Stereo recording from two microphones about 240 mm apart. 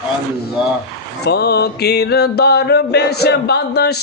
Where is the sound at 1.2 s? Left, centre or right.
Left.